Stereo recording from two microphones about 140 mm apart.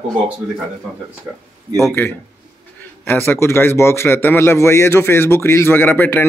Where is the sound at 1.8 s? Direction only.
15° left (ahead or behind).